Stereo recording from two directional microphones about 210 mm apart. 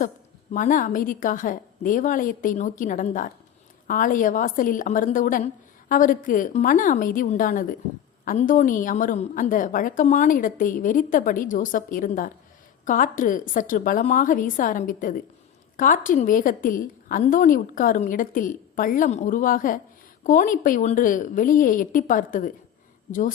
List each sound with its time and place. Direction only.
0.5 s a woman's voice: 40° left (ahead or behind)